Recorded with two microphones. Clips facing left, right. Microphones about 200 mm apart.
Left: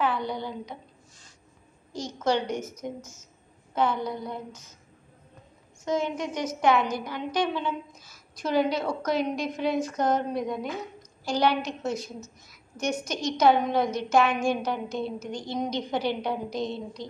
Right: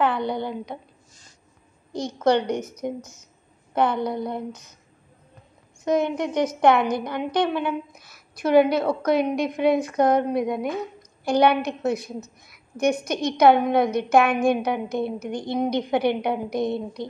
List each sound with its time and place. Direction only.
0.0 s a woman's voice: 60° right (ahead or behind)
1.9 s a woman's voice: 60° right (ahead or behind)
2.4 s a woman's voice: 15° right (ahead or behind)
3.7 s a woman's voice: 60° right (ahead or behind)
5.9 s a woman's voice: 60° right (ahead or behind)